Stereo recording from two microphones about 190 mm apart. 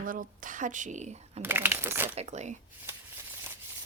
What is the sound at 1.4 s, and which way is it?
Speech, 10° right (ahead or behind).